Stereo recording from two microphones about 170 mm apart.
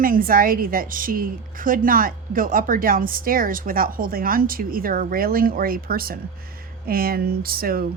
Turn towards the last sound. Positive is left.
turn(degrees=-60)  # may be behind; listen again after turning